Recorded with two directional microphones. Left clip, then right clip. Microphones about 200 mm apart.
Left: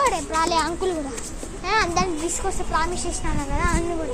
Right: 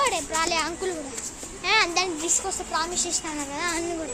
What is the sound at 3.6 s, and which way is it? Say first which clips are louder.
Speech: left 4 dB; 15° right (ahead or behind).